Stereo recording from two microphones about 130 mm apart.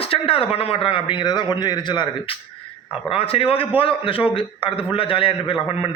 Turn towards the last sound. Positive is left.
turn(degrees=45)  # may be behind; listen again after turning